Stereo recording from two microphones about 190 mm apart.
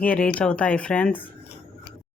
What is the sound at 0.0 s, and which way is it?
A woman's voice, 5° left (ahead or behind).